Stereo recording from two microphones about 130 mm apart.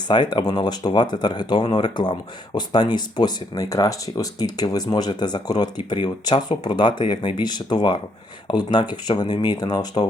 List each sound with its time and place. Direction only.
0.1 s speech: 35° left (ahead or behind)